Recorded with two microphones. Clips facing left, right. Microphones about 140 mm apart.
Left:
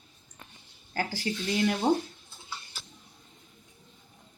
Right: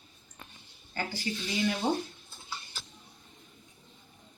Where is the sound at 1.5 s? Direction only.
55° left (ahead or behind).